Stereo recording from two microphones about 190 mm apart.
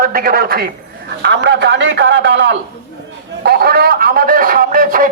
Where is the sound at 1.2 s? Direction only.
70° right (ahead or behind).